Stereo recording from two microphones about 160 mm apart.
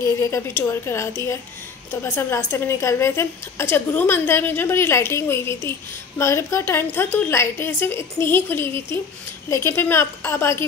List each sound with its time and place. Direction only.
0.0 s a woman's voice: 15° left (ahead or behind)